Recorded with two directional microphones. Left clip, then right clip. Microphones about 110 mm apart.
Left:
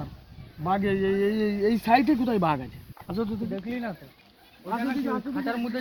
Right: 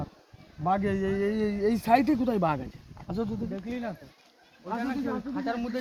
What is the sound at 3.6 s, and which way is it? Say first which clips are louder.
Speech: left 2 dB; 5° right (ahead or behind).